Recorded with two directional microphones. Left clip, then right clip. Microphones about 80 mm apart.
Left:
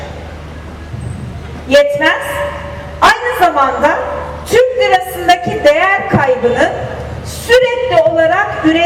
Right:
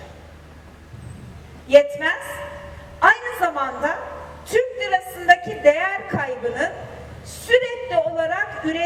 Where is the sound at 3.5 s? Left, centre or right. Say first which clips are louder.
Left 12 dB; right.